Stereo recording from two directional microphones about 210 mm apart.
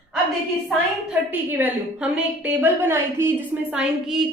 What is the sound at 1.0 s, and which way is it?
A woman's voice, 10° right (ahead or behind).